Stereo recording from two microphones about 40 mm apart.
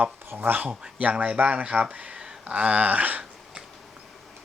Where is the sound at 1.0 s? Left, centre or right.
Right.